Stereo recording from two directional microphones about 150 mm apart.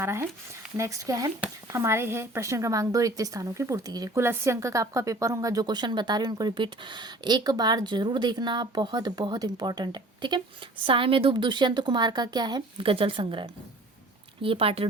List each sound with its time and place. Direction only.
0.0 s a woman's voice: 15° right (ahead or behind); by 14.8 s 40° right (ahead or behind)